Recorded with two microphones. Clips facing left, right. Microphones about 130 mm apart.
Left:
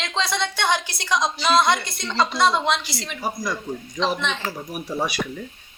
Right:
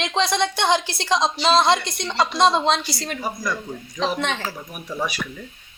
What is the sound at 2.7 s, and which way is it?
Speech, 45° right (ahead or behind).